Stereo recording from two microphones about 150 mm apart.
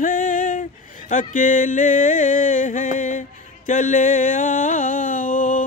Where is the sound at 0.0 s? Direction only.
65° left (ahead or behind).